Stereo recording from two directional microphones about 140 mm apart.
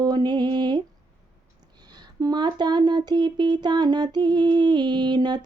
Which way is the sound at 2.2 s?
30° right (ahead or behind).